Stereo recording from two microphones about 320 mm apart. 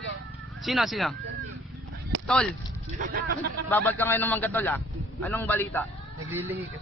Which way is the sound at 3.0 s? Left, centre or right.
Right.